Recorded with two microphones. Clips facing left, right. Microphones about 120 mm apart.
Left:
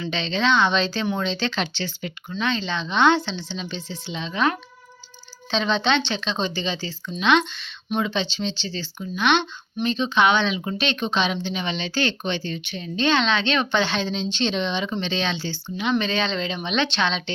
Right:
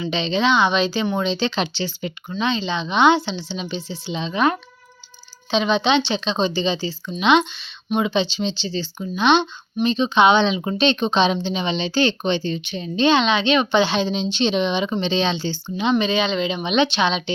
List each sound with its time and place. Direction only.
0.0 s a woman's voice: 15° right (ahead or behind)
5.5 s a woman's voice: 10° right (ahead or behind)
16.0 s a woman's voice: 10° right (ahead or behind)